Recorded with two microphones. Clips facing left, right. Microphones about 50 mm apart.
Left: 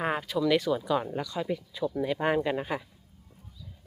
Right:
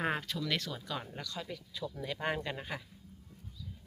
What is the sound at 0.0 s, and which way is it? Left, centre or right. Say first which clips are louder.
Speech: left 7 dB; centre.